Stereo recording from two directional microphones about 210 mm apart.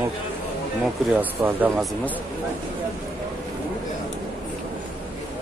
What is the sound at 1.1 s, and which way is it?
Speech, 10° right (ahead or behind).